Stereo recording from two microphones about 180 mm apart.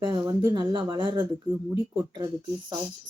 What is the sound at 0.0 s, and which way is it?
Speech, 25° right (ahead or behind).